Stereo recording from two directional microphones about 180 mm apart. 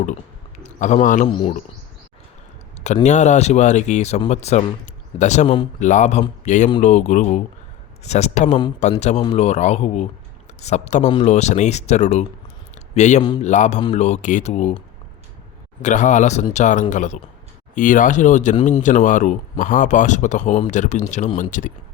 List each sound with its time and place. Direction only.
0.6 s a sound: 40° left (ahead or behind)
1.0 s speech: 45° left (ahead or behind)
1.3 s speech: 25° left (ahead or behind)
2.8 s speech: 40° left (ahead or behind)
15.8 s speech: 45° left (ahead or behind)